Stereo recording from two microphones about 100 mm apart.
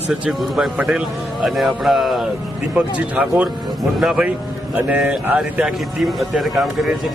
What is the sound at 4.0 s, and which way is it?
A man's voice, 5° right (ahead or behind).